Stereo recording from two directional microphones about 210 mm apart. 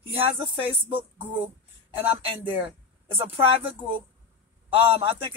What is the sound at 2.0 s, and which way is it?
Speech, 10° right (ahead or behind).